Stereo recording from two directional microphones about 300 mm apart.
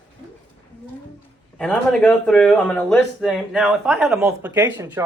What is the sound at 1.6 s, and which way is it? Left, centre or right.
Speech, centre.